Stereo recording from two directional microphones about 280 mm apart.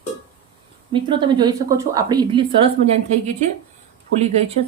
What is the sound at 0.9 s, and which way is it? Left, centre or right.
A woman's voice, centre.